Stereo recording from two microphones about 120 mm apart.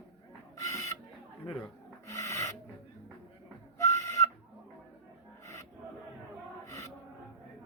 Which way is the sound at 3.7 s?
25° left (ahead or behind).